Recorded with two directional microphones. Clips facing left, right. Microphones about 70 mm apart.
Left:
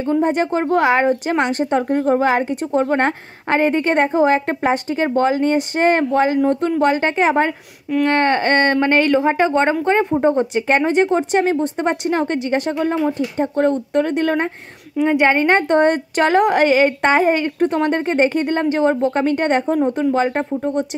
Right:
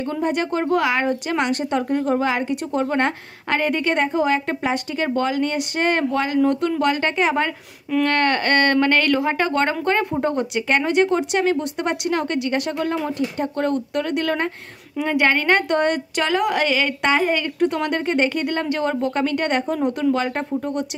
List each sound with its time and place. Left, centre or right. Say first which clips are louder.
0.0 s a woman's voice: left 5 dB; left
10.4 s a woman's voice: left 4 dB; left